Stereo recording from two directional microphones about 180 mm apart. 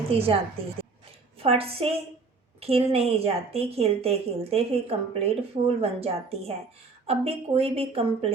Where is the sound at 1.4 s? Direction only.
30° right (ahead or behind).